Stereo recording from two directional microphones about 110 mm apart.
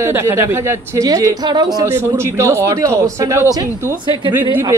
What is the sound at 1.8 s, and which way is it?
Speech, 20° right (ahead or behind).